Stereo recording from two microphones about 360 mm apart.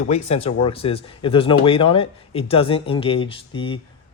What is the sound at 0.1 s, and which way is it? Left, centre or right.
A man's voice, centre.